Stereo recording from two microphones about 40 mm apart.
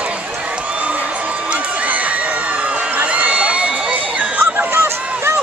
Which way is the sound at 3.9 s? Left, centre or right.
Right.